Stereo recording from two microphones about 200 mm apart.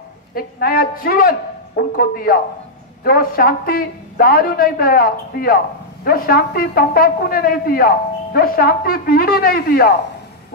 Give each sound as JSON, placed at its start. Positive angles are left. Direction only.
{"t": 0.3, "sound": "speech", "side_deg": 45}